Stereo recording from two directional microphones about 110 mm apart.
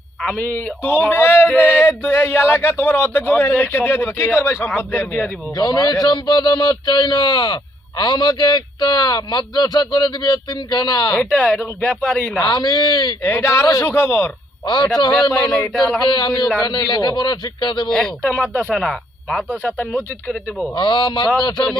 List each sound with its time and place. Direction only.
0.2 s a sound: 10° left (ahead or behind)
5.5 s speech: 35° left (ahead or behind)
11.2 s speech: 10° left (ahead or behind)
12.4 s speech: 40° left (ahead or behind)
13.2 s a sound: 25° left (ahead or behind)
15.3 s speech: 5° left (ahead or behind)
16.0 s speech: 40° left (ahead or behind)
17.8 s speech: 5° left (ahead or behind)
18.3 s speech: 15° left (ahead or behind)
20.7 s speech: 45° left (ahead or behind)